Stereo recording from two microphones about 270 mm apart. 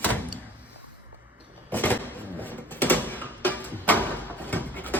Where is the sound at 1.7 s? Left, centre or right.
Centre.